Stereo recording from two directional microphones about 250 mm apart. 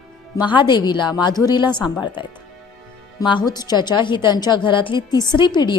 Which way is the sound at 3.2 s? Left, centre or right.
Centre.